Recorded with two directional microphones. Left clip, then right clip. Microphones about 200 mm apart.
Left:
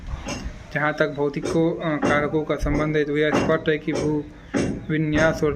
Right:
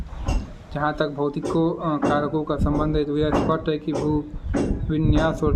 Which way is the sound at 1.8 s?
15° left (ahead or behind).